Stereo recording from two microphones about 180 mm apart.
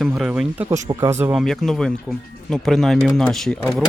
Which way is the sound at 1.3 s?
Centre (ahead or behind).